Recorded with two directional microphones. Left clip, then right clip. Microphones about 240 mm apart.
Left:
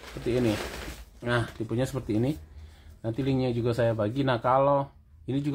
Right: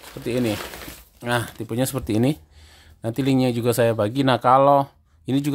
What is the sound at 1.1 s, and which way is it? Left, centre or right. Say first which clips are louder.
Speech: right 4 dB; right.